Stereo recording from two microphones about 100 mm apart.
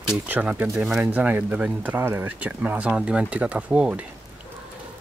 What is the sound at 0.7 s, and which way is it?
Speech, 5° right (ahead or behind).